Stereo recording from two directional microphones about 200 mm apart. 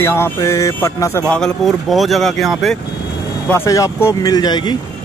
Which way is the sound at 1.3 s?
Centre (ahead or behind).